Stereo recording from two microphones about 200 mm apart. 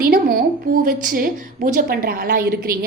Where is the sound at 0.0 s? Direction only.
45° right (ahead or behind).